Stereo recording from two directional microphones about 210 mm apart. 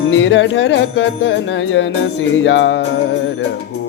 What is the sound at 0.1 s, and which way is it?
Music, 60° left (ahead or behind).